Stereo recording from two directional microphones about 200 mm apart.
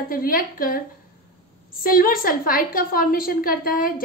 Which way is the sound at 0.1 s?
45° left (ahead or behind).